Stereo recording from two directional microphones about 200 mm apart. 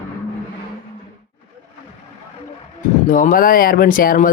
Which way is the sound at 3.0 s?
40° left (ahead or behind).